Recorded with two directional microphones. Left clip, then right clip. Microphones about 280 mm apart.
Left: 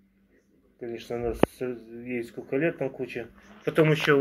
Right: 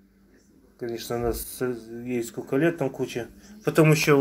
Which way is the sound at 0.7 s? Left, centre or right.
Right.